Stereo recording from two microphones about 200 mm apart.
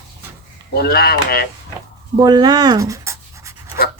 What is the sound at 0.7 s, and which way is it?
Speech, 50° left (ahead or behind).